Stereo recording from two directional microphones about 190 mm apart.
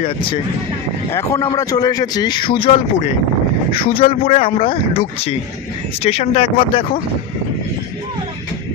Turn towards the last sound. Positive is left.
turn(degrees=30)  # may be behind; listen again after turning